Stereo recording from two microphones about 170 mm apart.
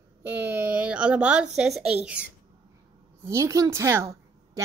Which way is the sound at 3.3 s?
15° right (ahead or behind).